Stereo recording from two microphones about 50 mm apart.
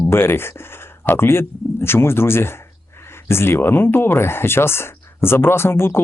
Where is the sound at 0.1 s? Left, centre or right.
Left.